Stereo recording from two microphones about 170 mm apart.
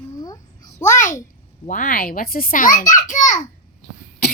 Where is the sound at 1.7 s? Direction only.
55° left (ahead or behind).